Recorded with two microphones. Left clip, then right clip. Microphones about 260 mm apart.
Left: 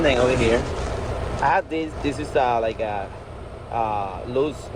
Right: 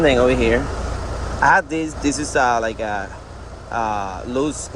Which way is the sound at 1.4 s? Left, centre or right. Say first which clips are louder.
Right 6 dB; right.